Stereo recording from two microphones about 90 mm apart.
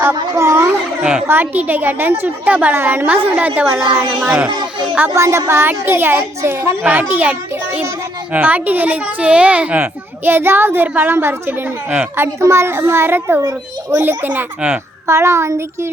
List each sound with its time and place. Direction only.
0.0 s a sound: 30° right (ahead or behind)
1.3 s speech: 20° right (ahead or behind)
3.1 s a woman's voice: 15° right (ahead or behind)
5.1 s child singing: 35° right (ahead or behind)
5.5 s speech: 25° right (ahead or behind)
15.0 s child singing: 30° right (ahead or behind)